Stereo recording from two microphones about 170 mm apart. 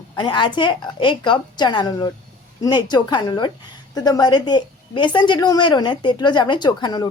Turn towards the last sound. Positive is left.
turn(degrees=25)  # may be behind; listen again after turning